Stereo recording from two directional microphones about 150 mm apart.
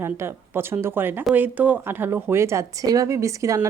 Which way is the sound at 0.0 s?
15° right (ahead or behind).